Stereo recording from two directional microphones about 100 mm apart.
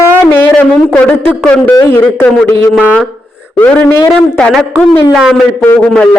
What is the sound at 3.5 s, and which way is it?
Speech, 20° left (ahead or behind).